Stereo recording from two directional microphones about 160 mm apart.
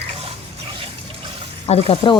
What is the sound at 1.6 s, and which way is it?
Speech, 40° left (ahead or behind).